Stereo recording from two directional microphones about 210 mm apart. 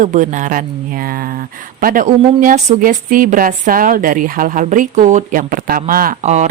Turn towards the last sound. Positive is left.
turn(degrees=-35)  # may be behind; listen again after turning